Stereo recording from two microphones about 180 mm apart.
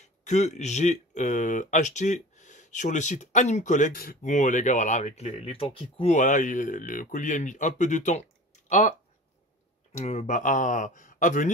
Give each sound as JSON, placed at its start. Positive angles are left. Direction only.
{"t": 0.0, "sound": "speech", "side_deg": 40}
{"t": 6.1, "sound": "speech", "side_deg": 45}
{"t": 9.9, "sound": "speech", "side_deg": 35}